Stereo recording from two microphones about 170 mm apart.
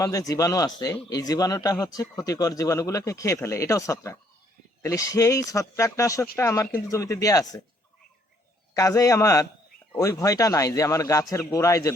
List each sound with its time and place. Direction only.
0.0 s speech: 20° left (ahead or behind)
8.7 s speech: 20° left (ahead or behind)